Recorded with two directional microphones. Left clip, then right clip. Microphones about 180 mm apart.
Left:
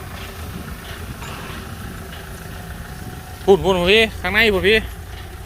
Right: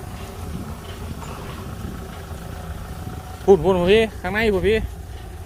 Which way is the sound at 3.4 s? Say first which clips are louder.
Left 1 dB; 25° right (ahead or behind).